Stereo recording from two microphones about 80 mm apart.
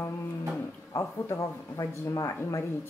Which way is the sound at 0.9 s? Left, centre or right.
Left.